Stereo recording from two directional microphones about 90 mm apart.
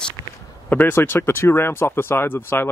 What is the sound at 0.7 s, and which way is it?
Speech, 20° left (ahead or behind).